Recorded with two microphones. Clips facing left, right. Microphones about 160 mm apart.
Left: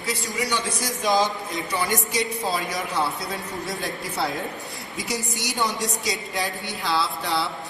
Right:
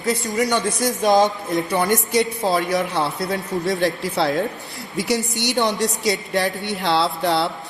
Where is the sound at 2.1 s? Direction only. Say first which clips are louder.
Right 7 dB; 65° right (ahead or behind).